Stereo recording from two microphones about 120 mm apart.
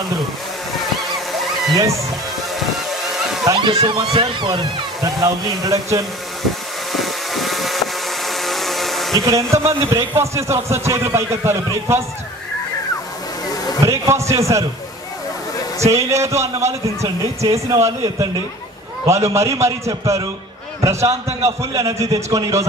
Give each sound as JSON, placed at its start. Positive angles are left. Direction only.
{"t": 1.7, "sound": "a man's voice", "side_deg": -25}
{"t": 2.7, "sound": "boat", "side_deg": 0}
{"t": 3.5, "sound": "speech", "side_deg": -45}
{"t": 5.2, "sound": "a man's voice", "side_deg": -30}
{"t": 6.9, "sound": "vehicle", "side_deg": 0}
{"t": 9.1, "sound": "a man's voice", "side_deg": -25}
{"t": 13.8, "sound": "a man's voice", "side_deg": -25}
{"t": 15.8, "sound": "a man's voice", "side_deg": -25}
{"t": 19.3, "sound": "a man's voice", "side_deg": -25}